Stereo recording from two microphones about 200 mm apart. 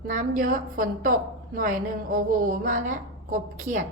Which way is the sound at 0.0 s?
45° right (ahead or behind).